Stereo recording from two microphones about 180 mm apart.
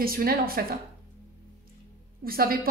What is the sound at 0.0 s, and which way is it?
Speech, 55° right (ahead or behind).